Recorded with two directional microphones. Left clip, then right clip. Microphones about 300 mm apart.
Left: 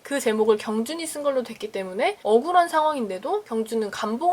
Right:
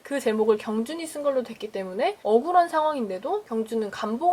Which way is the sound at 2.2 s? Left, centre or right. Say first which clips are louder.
Left 2 dB; right.